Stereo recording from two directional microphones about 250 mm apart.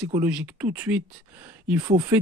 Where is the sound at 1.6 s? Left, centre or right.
Centre.